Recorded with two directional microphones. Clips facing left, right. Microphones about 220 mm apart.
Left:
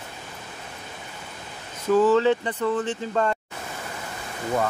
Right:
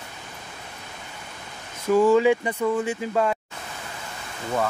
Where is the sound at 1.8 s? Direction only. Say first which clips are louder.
Right 1 dB; 10° right (ahead or behind).